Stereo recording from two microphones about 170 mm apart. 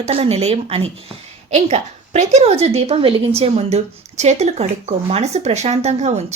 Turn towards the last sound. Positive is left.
turn(degrees=-40)  # may be behind; listen again after turning